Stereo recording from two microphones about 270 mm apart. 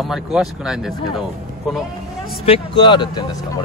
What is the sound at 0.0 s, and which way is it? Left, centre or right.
Speech, centre.